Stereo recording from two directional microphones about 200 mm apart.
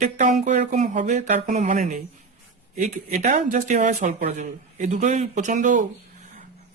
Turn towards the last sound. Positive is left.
turn(degrees=-40)  # may be behind; listen again after turning